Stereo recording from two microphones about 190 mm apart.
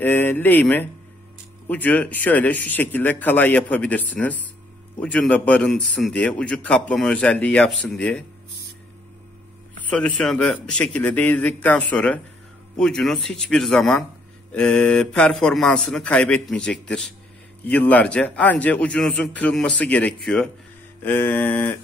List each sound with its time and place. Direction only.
0.0 s a man's voice: 10° left (ahead or behind)
9.8 s a man's voice: 5° left (ahead or behind)